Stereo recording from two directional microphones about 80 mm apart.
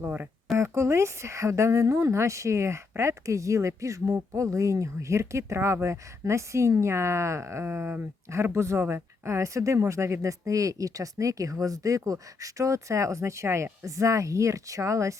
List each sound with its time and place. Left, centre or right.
0.0 s speech: right
0.5 s speech: right